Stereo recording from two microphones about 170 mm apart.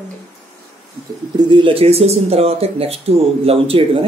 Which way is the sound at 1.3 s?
30° right (ahead or behind).